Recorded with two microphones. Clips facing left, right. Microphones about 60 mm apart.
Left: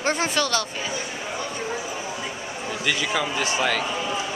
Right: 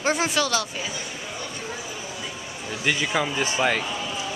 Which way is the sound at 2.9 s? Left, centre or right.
Centre.